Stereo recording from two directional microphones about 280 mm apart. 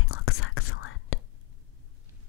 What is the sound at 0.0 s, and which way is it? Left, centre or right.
Whispering, left.